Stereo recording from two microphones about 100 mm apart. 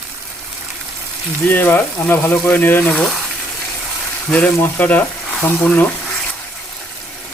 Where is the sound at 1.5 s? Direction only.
20° left (ahead or behind).